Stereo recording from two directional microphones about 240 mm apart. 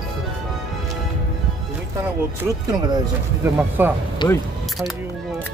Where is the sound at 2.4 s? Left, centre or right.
Centre.